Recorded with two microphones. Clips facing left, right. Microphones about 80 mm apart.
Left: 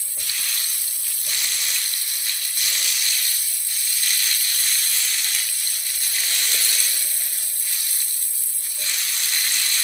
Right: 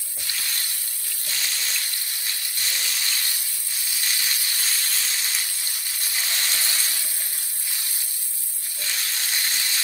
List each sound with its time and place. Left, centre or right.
0.2 s frying: centre
1.2 s water: centre
2.8 s sizzle: right
6.1 s frying: centre
8.8 s sizzle: centre
9.3 s a sound: centre